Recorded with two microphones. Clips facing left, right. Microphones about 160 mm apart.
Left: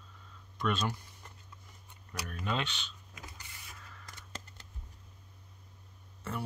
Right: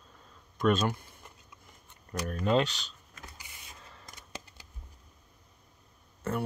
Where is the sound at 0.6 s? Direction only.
50° right (ahead or behind).